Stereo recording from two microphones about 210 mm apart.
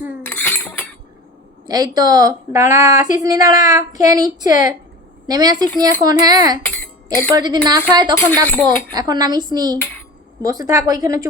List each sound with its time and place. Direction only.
0.2 s cutlery: 10° left (ahead or behind)
1.6 s a woman's voice: 20° right (ahead or behind)
6.7 s a sound: 10° left (ahead or behind)
7.3 s a woman's voice: 20° right (ahead or behind)